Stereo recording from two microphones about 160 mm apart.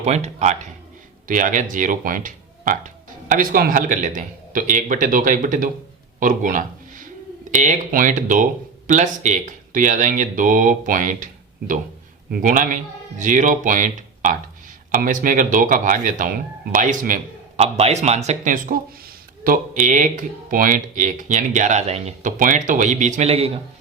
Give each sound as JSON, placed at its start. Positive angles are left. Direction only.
{"t": 0.0, "sound": "speech", "side_deg": -45}
{"t": 6.1, "sound": "a sound", "side_deg": -55}
{"t": 7.5, "sound": "speech", "side_deg": -50}
{"t": 12.3, "sound": "speech", "side_deg": -60}
{"t": 17.6, "sound": "speech", "side_deg": -40}